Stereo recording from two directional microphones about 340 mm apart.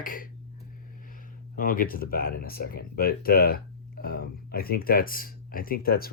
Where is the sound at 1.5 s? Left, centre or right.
Left.